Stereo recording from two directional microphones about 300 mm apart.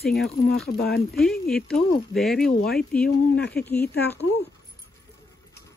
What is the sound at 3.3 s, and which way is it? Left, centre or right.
Speech, left.